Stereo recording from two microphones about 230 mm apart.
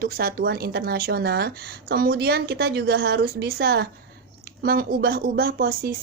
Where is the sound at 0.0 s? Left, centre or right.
Right.